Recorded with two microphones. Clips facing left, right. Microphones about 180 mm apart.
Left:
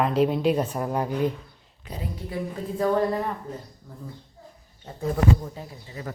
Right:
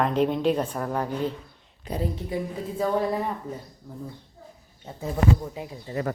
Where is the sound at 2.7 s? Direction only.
5° right (ahead or behind).